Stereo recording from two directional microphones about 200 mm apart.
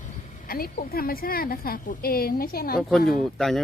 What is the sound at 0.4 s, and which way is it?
A woman's voice, 45° left (ahead or behind).